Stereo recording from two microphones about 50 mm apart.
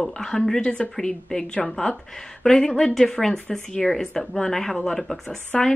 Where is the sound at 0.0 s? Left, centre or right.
Centre.